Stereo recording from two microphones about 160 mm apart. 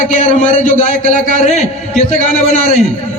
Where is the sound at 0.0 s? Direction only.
50° left (ahead or behind).